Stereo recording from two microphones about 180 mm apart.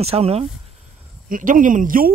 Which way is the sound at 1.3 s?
45° right (ahead or behind).